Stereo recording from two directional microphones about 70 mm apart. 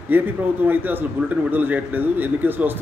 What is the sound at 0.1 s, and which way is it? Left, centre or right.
Speech, right.